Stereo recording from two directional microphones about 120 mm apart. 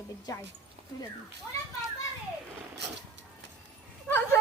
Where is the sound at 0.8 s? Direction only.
55° right (ahead or behind).